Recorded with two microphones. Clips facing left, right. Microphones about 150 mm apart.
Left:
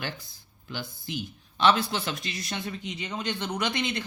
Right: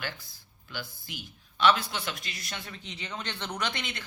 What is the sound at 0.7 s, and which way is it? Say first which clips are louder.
Speech: left 6 dB; 20° left (ahead or behind).